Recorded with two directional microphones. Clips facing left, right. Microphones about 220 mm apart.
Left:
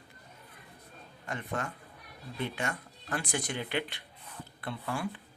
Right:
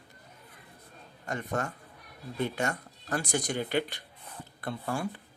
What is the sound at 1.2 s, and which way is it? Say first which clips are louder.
Speech: right 3 dB; 45° right (ahead or behind).